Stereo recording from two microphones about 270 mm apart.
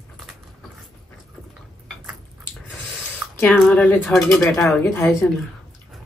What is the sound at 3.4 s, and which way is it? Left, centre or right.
Speech, centre.